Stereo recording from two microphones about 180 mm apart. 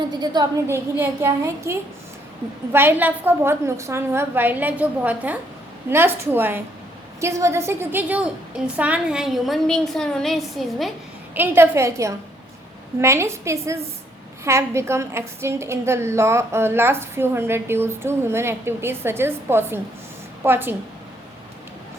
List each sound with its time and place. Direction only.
0.1 s a woman's voice: 20° right (ahead or behind); by 10.9 s centre (ahead or behind)
11.3 s a woman's voice: 10° right (ahead or behind)